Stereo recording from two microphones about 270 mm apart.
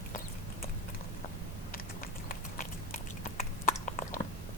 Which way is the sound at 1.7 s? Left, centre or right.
Left.